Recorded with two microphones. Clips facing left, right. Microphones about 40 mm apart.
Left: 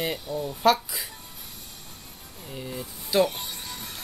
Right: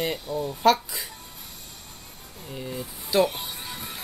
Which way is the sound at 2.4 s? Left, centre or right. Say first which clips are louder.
Right 2 dB; centre.